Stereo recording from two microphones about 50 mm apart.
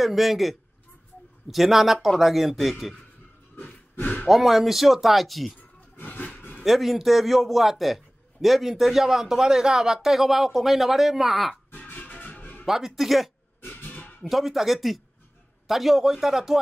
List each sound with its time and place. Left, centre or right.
0.0 s a man's voice: centre
4.0 s speech: left
4.3 s a man's voice: centre
6.0 s a sound: left
6.6 s a man's voice: centre
11.9 s music: left
12.6 s a man's voice: centre
13.8 s a sound: left
14.3 s a man's voice: centre